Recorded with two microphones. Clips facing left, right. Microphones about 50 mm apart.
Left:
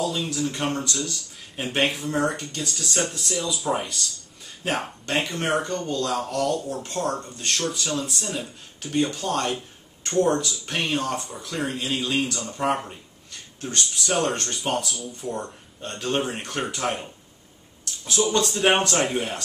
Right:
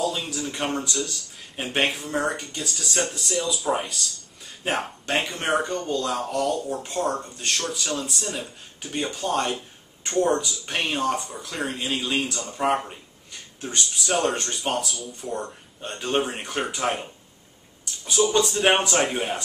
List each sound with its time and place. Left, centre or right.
0.0 s speech: centre
17.9 s a sound: centre
18.3 s speech: centre